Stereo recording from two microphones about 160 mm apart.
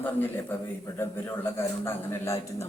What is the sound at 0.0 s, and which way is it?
A man's voice, 15° left (ahead or behind).